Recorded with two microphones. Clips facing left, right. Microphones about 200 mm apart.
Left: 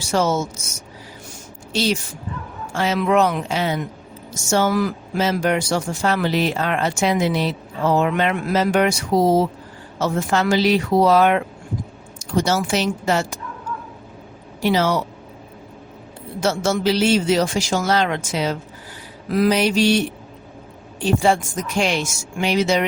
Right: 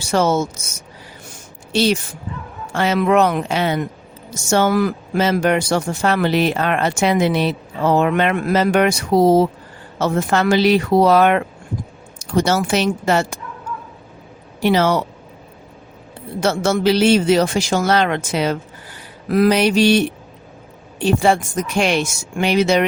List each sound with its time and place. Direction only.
0.0 s speech: 60° right (ahead or behind)
1.7 s speech: 60° right (ahead or behind)
14.6 s speech: 60° right (ahead or behind)
16.4 s speech: 60° right (ahead or behind)